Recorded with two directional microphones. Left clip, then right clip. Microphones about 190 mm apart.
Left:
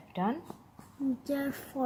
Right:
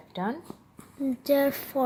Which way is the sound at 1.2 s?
50° right (ahead or behind).